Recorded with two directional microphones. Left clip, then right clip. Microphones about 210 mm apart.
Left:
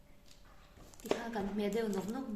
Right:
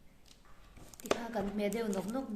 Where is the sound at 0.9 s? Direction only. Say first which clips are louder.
Right 2 dB; 35° right (ahead or behind).